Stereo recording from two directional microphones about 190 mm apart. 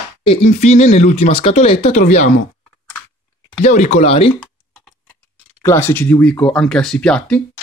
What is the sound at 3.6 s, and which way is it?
Speech, 40° left (ahead or behind).